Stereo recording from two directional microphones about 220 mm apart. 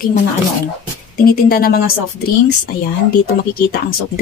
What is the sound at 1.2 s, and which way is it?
Speech, 40° left (ahead or behind).